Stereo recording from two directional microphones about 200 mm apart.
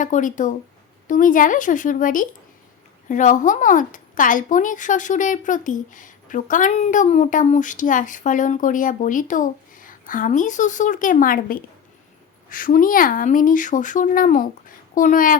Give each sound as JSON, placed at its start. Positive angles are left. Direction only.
{"t": 0.0, "sound": "a woman's voice", "side_deg": 40}